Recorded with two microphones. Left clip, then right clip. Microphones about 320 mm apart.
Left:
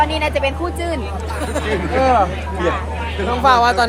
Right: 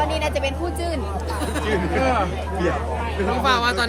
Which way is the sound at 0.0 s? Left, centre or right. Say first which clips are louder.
Left 5 dB; centre.